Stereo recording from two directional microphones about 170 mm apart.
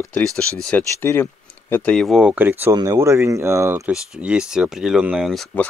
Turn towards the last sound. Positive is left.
turn(degrees=5)  # may be behind; listen again after turning